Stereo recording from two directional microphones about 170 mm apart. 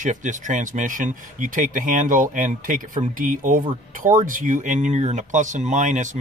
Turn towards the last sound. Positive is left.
turn(degrees=-45)  # may be behind; listen again after turning